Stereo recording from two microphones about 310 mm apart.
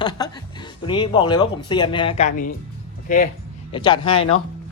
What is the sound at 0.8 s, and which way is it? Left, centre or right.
Speech, centre.